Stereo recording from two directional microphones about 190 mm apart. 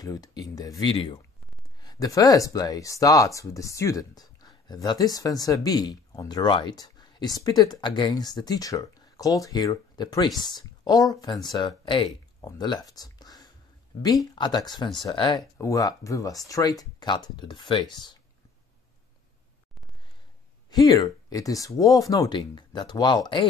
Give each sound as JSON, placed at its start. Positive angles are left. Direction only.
{"t": 0.0, "sound": "speech", "side_deg": 20}
{"t": 0.9, "sound": "speech", "side_deg": 30}
{"t": 20.7, "sound": "speech", "side_deg": 20}